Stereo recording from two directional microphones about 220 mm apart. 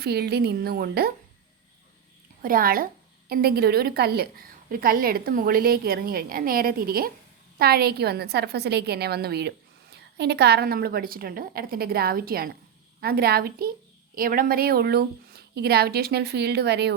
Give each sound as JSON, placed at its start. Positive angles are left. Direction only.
{"t": 0.0, "sound": "a woman's voice", "side_deg": -45}
{"t": 2.4, "sound": "a woman's voice", "side_deg": -40}